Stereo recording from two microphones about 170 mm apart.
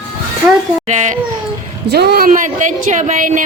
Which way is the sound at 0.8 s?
45° right (ahead or behind).